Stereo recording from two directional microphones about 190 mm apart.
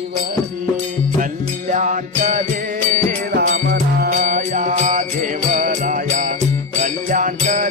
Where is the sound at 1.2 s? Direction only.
45° right (ahead or behind).